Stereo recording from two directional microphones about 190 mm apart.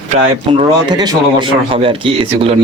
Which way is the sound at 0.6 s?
20° right (ahead or behind).